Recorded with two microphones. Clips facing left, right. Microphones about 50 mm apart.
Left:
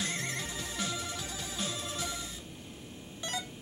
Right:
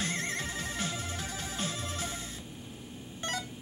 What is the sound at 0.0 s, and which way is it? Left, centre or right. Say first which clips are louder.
Music: right 2 dB; right.